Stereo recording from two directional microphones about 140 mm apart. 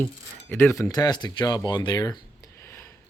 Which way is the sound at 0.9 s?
30° left (ahead or behind).